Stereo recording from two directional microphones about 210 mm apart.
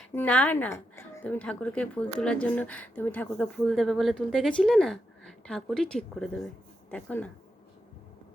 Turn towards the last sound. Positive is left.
turn(degrees=5)  # may be behind; listen again after turning